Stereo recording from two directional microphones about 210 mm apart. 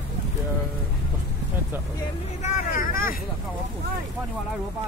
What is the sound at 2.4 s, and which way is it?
Speech, 40° left (ahead or behind).